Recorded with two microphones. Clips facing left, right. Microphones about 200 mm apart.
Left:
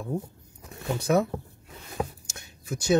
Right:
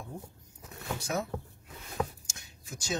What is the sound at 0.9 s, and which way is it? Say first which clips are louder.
Speech: left 10 dB; 60° left (ahead or behind).